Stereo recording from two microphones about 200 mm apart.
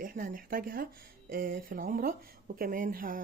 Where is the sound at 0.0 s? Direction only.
45° right (ahead or behind).